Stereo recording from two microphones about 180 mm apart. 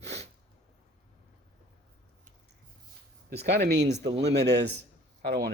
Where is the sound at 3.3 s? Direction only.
65° right (ahead or behind).